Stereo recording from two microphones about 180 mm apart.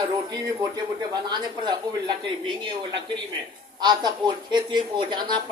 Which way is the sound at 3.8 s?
25° right (ahead or behind).